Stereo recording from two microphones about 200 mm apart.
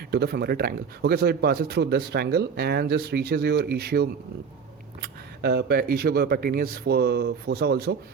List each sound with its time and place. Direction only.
0.1 s speech: 55° right (ahead or behind)